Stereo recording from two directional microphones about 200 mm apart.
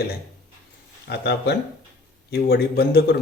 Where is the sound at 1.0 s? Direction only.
55° left (ahead or behind).